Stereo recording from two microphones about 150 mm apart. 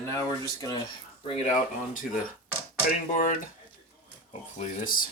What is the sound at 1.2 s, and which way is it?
Speech, 45° left (ahead or behind).